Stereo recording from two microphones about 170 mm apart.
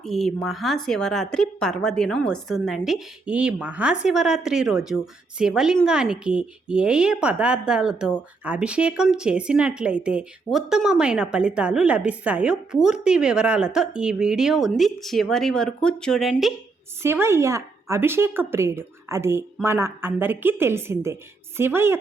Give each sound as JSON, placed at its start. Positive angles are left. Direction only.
{"t": 0.0, "sound": "speech", "side_deg": 0}
{"t": 17.0, "sound": "speech", "side_deg": -15}